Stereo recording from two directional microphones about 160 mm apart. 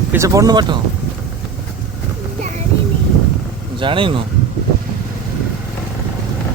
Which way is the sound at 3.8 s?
30° right (ahead or behind).